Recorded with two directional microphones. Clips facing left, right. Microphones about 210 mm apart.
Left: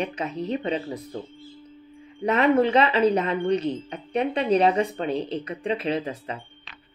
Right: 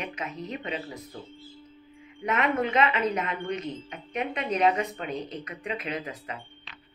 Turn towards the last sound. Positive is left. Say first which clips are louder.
# left 7 dB
turn(degrees=30)  # may be behind; listen again after turning